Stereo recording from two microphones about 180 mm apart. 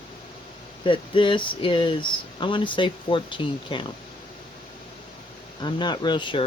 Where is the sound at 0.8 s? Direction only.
30° left (ahead or behind).